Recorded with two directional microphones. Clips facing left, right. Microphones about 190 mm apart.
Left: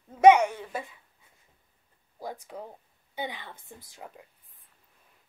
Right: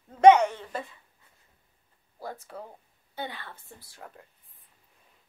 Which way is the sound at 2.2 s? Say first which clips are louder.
Left 1 dB; 15° left (ahead or behind).